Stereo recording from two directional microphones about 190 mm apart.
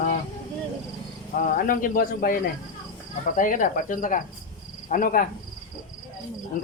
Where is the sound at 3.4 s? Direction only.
45° left (ahead or behind).